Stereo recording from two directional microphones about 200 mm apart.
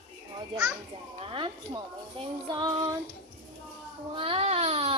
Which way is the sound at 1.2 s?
25° right (ahead or behind).